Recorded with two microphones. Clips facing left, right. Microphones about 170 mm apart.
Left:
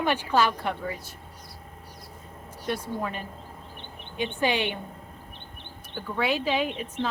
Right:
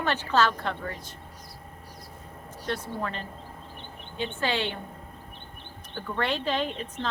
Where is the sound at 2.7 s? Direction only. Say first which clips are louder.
Left 2 dB; 10° left (ahead or behind).